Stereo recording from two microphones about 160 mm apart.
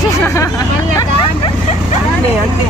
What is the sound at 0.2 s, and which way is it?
Speech, 20° left (ahead or behind).